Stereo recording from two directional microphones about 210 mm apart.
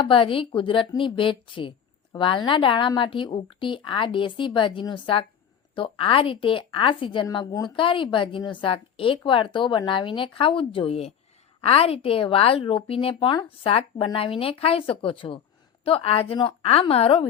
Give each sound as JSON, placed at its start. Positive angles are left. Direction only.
{"t": 0.0, "sound": "speech", "side_deg": 25}